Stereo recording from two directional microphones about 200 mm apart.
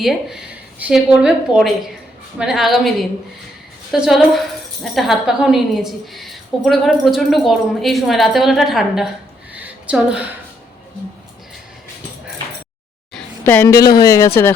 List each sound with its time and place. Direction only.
0.0 s speech: centre (ahead or behind)
3.9 s speech: centre (ahead or behind)
9.6 s a sound: 5° right (ahead or behind)
13.4 s a woman's voice: 10° left (ahead or behind)